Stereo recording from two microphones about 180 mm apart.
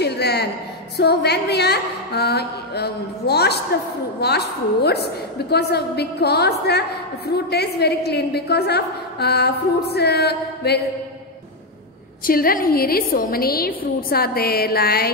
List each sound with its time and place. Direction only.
0.0 s a sound: 65° left (ahead or behind)
0.9 s a woman's voice: 65° left (ahead or behind)
12.3 s a woman's voice: 55° left (ahead or behind)